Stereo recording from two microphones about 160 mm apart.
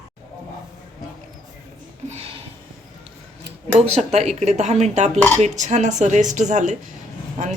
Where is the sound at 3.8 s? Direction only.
40° right (ahead or behind).